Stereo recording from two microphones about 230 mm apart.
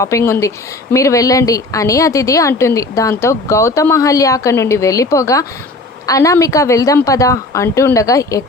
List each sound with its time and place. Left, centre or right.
0.0 s speech: centre